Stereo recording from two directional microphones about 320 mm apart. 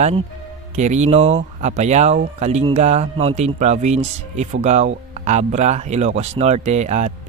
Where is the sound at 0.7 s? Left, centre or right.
Right.